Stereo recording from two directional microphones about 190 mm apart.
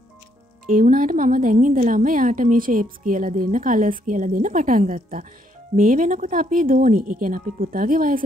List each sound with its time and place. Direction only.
0.7 s a woman's voice: 45° right (ahead or behind)